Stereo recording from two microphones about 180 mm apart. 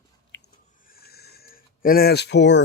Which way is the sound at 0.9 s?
60° left (ahead or behind).